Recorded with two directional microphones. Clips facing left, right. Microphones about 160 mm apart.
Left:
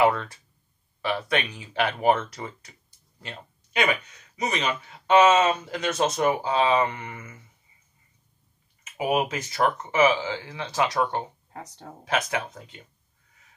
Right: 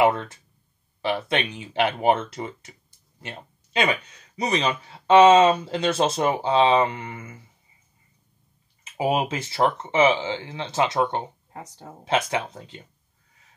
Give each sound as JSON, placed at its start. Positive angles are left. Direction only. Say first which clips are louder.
{"t": 0.0, "sound": "speech", "louder": "right 1 dB", "side_deg": -20}
{"t": 8.9, "sound": "speech", "louder": "right 1 dB", "side_deg": -30}
{"t": 11.5, "sound": "speech", "louder": "left 1 dB", "side_deg": -5}
{"t": 12.0, "sound": "speech", "louder": "right 3 dB", "side_deg": -25}